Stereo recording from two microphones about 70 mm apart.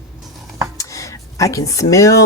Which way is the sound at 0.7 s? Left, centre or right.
Left.